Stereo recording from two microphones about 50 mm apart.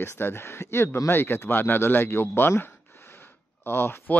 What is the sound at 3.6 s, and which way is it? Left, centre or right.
Speech, left.